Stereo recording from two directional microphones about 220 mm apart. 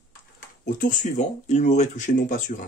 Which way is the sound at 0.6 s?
40° left (ahead or behind).